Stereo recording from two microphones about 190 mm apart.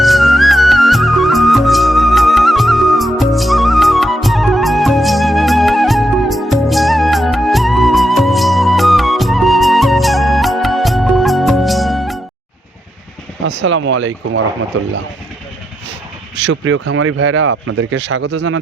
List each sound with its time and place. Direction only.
0.0 s music: centre (ahead or behind)
13.4 s speech: 75° right (ahead or behind)
16.3 s speech: 75° right (ahead or behind)